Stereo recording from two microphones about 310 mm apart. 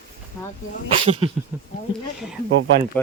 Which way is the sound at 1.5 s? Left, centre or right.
Centre.